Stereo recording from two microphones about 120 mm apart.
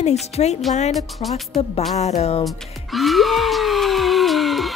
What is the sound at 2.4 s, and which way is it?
Music, centre (ahead or behind).